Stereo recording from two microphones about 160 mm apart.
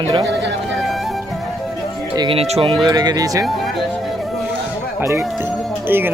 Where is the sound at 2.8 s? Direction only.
25° right (ahead or behind).